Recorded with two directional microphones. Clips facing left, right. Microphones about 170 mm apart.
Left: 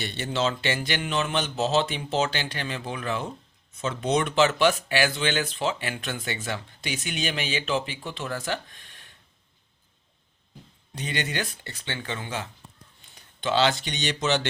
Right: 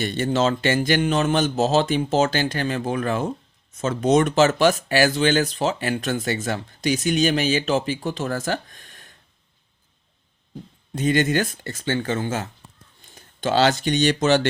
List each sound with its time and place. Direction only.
0.0 s speech: 45° right (ahead or behind)
10.9 s speech: 45° right (ahead or behind)